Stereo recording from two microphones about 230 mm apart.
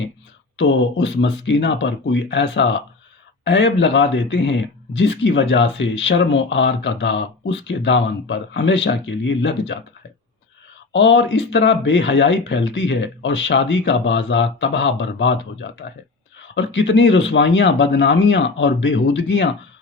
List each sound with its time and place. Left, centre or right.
0.5 s speech: left
10.9 s speech: left